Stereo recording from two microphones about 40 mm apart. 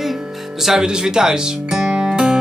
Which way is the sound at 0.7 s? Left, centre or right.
Centre.